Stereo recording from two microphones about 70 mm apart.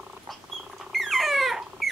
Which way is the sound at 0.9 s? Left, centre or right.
Centre.